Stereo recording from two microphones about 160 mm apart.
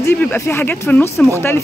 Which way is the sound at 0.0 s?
15° left (ahead or behind).